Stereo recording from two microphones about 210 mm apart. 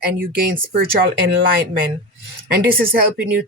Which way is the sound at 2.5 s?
45° right (ahead or behind).